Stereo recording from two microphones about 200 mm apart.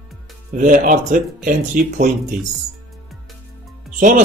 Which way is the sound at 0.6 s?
40° right (ahead or behind).